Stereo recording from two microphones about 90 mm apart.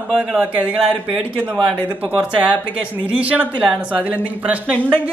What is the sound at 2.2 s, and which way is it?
Speech, 10° right (ahead or behind).